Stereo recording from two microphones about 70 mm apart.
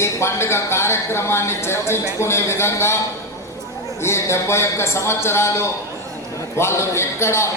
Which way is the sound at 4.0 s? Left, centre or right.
Left.